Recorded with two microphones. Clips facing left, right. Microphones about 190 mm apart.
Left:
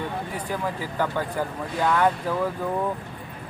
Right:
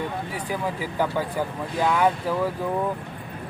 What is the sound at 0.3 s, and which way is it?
Speech, 10° right (ahead or behind).